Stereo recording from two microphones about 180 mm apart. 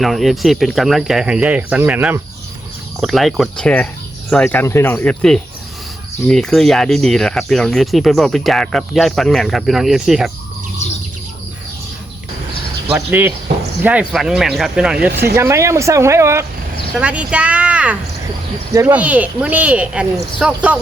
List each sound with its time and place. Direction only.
0.0 s speech: centre (ahead or behind)
12.9 s speech: 10° right (ahead or behind)
15.1 s speech: 60° right (ahead or behind)
15.4 s speech: 15° right (ahead or behind)